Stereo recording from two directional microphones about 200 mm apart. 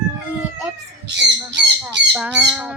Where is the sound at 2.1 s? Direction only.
5° right (ahead or behind).